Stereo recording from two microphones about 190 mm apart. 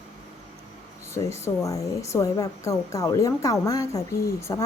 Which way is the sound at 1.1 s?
15° left (ahead or behind).